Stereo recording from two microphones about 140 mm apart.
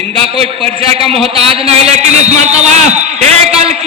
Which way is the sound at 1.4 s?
45° right (ahead or behind).